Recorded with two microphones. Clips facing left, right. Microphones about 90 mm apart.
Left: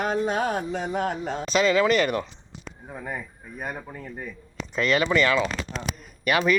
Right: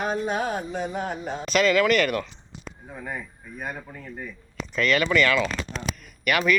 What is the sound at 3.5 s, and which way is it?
Speech, 10° left (ahead or behind).